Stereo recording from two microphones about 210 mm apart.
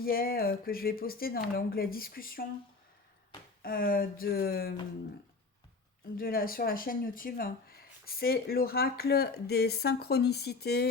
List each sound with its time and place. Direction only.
0.0 s speech: 45° left (ahead or behind)
3.6 s speech: 45° left (ahead or behind)
6.1 s speech: 45° left (ahead or behind)